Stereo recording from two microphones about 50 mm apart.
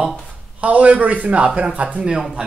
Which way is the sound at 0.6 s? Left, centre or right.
Right.